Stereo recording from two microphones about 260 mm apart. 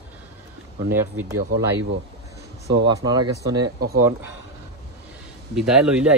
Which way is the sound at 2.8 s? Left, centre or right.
Centre.